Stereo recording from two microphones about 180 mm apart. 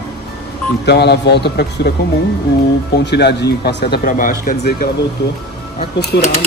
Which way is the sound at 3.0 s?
65° left (ahead or behind).